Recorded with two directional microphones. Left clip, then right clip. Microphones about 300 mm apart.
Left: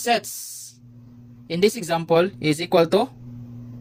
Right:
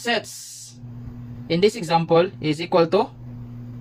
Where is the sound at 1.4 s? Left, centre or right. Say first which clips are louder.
Right 1 dB; left.